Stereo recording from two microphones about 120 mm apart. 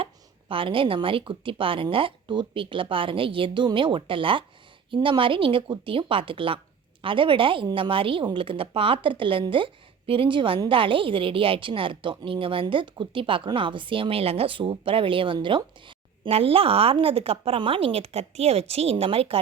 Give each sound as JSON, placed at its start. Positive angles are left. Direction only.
{"t": 0.0, "sound": "a woman's voice", "side_deg": -45}